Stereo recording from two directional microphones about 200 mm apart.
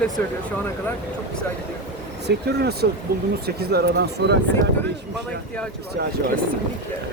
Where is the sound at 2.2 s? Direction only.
55° right (ahead or behind).